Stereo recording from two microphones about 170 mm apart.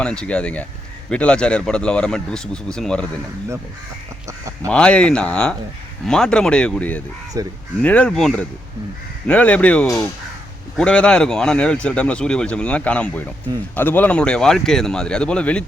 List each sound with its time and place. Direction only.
0.0 s speech: 5° left (ahead or behind)
4.3 s quack: 20° right (ahead or behind)
4.7 s speech: 5° left (ahead or behind)
7.3 s speech: 20° right (ahead or behind)
7.8 s speech: 5° left (ahead or behind)
10.8 s speech: 5° left (ahead or behind)